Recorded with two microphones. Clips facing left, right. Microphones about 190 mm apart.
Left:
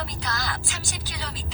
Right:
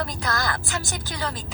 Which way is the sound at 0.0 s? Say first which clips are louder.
Right 5 dB; 50° right (ahead or behind).